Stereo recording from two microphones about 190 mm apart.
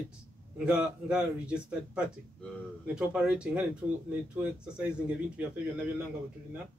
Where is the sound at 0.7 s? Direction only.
5° right (ahead or behind).